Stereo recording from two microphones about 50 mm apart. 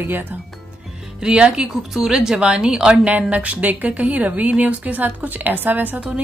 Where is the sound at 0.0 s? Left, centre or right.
Right.